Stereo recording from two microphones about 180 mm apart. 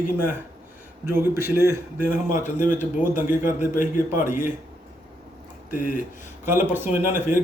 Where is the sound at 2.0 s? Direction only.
45° left (ahead or behind).